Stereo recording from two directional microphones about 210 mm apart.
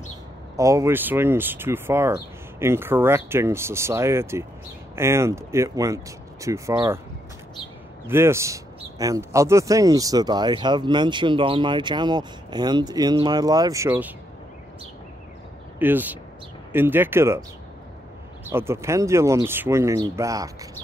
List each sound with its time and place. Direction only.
0.6 s speech: 15° right (ahead or behind)
8.1 s speech: 10° right (ahead or behind)
15.8 s speech: 10° right (ahead or behind)
18.5 s speech: 10° right (ahead or behind)